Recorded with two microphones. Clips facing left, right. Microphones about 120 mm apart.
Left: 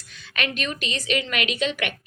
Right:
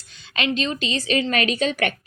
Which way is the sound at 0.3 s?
25° right (ahead or behind).